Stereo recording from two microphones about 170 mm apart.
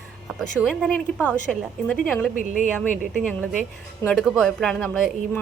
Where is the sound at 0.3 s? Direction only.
Centre (ahead or behind).